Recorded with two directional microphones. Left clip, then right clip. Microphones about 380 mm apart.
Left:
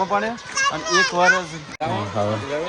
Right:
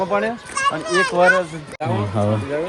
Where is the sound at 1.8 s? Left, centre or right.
Right.